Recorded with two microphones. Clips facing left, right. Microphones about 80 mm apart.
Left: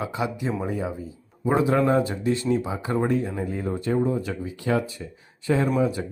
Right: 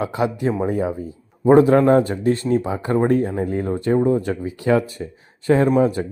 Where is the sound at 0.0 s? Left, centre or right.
Right.